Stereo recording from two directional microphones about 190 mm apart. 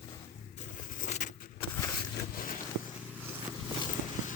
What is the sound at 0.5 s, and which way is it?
Vehicle, 40° left (ahead or behind).